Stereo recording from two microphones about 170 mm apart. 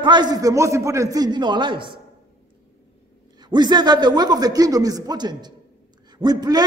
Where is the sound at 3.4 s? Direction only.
25° right (ahead or behind).